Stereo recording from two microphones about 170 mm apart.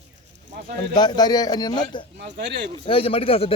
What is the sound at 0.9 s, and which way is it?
A man's voice, 25° left (ahead or behind).